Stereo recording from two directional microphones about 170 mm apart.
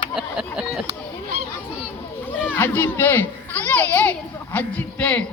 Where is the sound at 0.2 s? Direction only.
5° right (ahead or behind).